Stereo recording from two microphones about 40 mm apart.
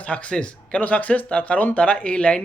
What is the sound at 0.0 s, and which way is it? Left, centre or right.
A man's voice, left.